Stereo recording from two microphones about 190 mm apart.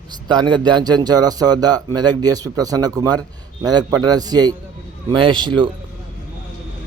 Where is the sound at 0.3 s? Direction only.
25° right (ahead or behind).